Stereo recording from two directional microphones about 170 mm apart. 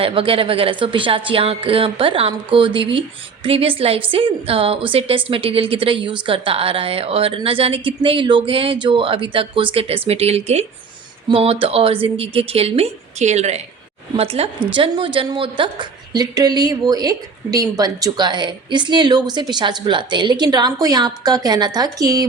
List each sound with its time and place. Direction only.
0.0 s a woman's voice: 30° right (ahead or behind)